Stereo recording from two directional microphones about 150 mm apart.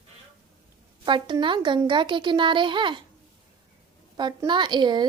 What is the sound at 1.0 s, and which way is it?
A woman's voice, 30° right (ahead or behind).